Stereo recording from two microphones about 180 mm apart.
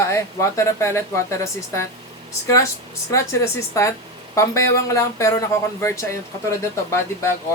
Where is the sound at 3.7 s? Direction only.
15° left (ahead or behind).